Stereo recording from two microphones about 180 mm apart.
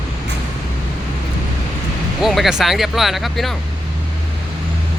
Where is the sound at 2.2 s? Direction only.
Centre (ahead or behind).